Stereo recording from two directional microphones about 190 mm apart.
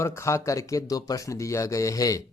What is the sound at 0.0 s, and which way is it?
Speech, 15° left (ahead or behind).